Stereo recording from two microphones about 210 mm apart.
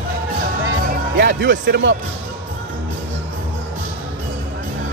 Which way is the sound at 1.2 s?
60° right (ahead or behind).